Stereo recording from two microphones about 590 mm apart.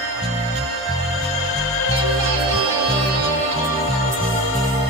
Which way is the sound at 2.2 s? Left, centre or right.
Left.